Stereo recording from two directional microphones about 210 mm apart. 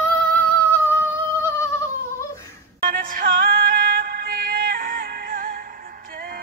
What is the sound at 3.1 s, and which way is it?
Music, 40° right (ahead or behind).